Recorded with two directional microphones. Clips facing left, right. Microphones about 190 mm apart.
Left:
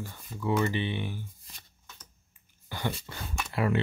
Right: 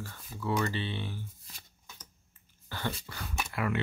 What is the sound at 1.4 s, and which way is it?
Shuffling cards, centre (ahead or behind).